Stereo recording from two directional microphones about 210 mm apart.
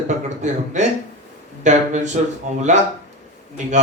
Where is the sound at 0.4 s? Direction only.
35° right (ahead or behind).